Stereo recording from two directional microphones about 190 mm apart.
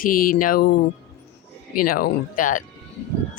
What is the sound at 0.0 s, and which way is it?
Speech, 50° left (ahead or behind).